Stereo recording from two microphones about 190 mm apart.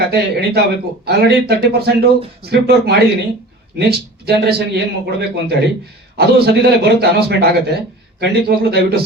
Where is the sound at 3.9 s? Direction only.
55° right (ahead or behind).